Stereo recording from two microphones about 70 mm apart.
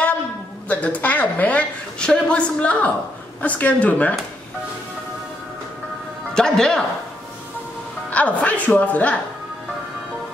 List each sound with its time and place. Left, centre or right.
0.7 s a woman's voice: left
6.3 s speech: centre
8.1 s a woman's voice: left